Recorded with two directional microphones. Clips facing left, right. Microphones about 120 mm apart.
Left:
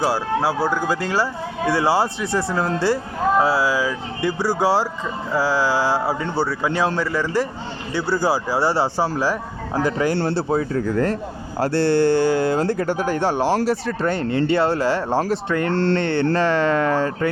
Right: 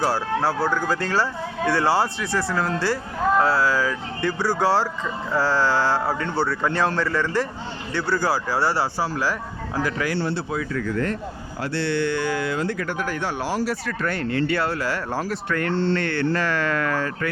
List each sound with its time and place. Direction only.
0.0 s speech: 5° left (ahead or behind)
10.2 s speech: 35° left (ahead or behind)
15.7 s mantra: 70° left (ahead or behind)
16.0 s speech: 25° left (ahead or behind)